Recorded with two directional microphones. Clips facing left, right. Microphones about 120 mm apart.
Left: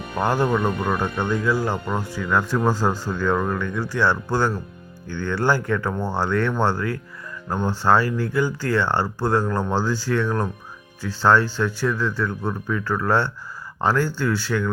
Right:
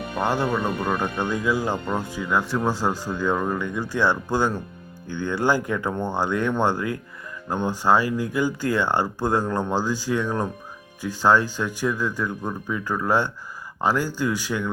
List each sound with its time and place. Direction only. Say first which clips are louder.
0.2 s speech: left 3 dB; centre (ahead or behind)
1.2 s speech: left 2 dB; 15° right (ahead or behind)
2.6 s speech: left 2 dB; centre (ahead or behind); by 5.9 s 20° right (ahead or behind)
5.9 s speech: even; 5° left (ahead or behind)
6.1 s speech: left 1 dB; 15° right (ahead or behind)